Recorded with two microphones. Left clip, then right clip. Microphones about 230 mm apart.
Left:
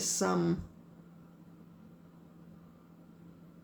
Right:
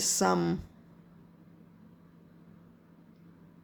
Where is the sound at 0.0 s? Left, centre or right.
Right.